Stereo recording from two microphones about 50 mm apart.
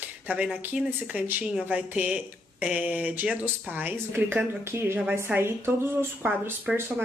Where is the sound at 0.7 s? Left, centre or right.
Right.